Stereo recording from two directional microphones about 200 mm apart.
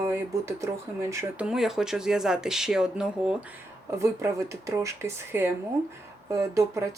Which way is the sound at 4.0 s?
15° right (ahead or behind).